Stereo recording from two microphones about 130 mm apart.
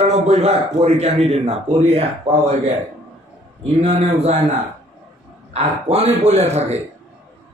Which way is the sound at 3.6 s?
55° right (ahead or behind).